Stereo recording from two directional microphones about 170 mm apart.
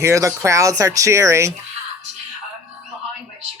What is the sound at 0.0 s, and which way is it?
Speech, 15° right (ahead or behind).